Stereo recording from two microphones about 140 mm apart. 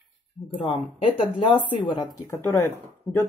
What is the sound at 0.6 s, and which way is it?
Speech, 40° left (ahead or behind).